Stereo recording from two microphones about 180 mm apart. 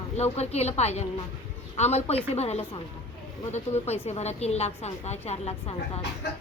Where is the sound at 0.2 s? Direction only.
35° left (ahead or behind).